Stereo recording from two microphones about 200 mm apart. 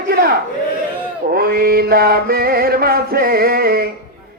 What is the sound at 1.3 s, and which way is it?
Mantra, 50° right (ahead or behind).